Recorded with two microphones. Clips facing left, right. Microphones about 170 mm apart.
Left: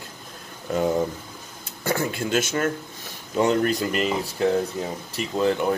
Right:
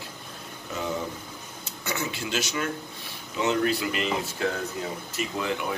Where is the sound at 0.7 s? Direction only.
50° left (ahead or behind).